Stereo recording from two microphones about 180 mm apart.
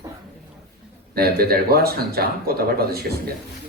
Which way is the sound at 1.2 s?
60° right (ahead or behind).